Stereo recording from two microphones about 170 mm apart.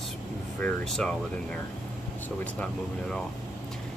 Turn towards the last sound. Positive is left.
turn(degrees=5)  # may be behind; listen again after turning